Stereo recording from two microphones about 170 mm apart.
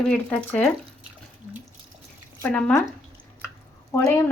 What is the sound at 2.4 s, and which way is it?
Speech, 10° left (ahead or behind).